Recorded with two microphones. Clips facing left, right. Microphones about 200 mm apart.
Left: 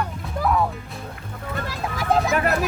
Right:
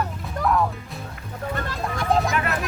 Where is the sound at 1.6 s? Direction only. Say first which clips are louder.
Left 2 dB; 5° left (ahead or behind).